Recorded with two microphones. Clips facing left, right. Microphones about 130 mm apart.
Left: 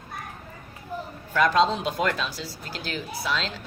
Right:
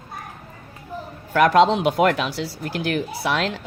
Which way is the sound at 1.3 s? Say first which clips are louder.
Right 6 dB; 65° right (ahead or behind).